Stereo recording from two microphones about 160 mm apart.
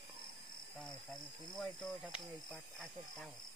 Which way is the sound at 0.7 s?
5° left (ahead or behind).